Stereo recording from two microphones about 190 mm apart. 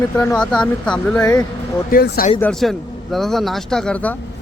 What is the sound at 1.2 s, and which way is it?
Speech, 15° left (ahead or behind).